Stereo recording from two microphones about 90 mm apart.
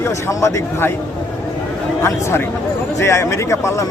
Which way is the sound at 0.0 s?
35° left (ahead or behind).